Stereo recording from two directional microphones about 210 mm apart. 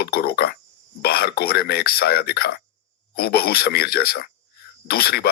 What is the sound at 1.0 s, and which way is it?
A man's voice, 50° left (ahead or behind).